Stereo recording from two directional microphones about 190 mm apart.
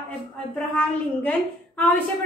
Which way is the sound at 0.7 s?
10° left (ahead or behind).